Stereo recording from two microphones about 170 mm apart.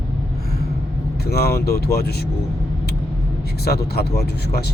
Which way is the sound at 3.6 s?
70° left (ahead or behind).